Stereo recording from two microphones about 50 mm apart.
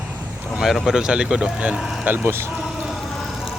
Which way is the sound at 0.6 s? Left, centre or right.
Centre.